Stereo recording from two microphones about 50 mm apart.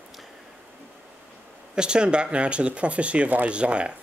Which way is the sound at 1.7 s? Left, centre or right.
Centre.